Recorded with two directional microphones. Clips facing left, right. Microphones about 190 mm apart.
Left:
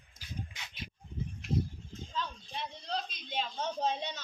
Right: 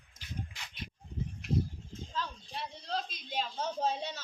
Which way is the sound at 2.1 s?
5° right (ahead or behind).